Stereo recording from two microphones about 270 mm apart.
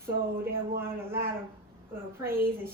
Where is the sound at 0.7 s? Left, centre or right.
Centre.